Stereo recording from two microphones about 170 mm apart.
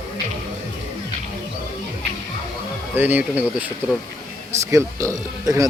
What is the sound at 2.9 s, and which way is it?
Speech, 10° right (ahead or behind).